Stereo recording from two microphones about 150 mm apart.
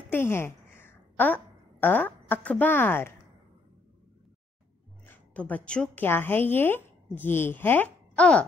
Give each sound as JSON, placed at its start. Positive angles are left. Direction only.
{"t": 0.1, "sound": "a woman's voice", "side_deg": 15}
{"t": 5.0, "sound": "a woman's voice", "side_deg": 10}